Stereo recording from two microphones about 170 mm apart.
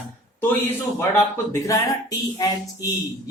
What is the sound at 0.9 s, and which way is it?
Speech, 15° left (ahead or behind).